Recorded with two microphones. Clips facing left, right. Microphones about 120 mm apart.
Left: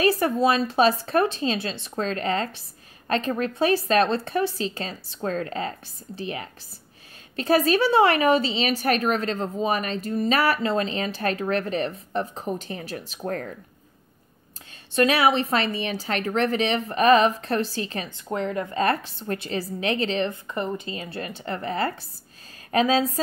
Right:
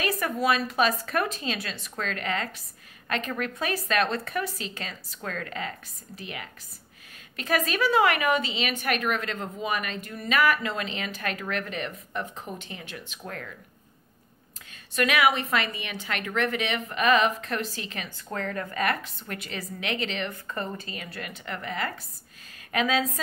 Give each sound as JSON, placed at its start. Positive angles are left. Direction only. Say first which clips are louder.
{"t": 0.0, "sound": "a woman's voice", "louder": "left 6 dB", "side_deg": 30}
{"t": 15.0, "sound": "a woman's voice", "louder": "left 4 dB", "side_deg": 30}
{"t": 18.3, "sound": "a woman's voice", "louder": "left 5 dB", "side_deg": 20}
{"t": 20.4, "sound": "a woman's voice", "louder": "left 5 dB", "side_deg": 20}